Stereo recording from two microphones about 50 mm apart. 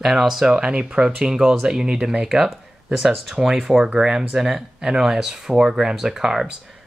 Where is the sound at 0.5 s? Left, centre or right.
Centre.